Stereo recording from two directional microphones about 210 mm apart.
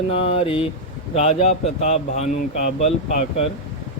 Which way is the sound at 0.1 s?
25° left (ahead or behind).